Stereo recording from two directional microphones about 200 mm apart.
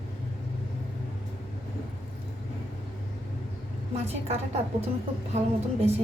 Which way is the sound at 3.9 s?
30° right (ahead or behind).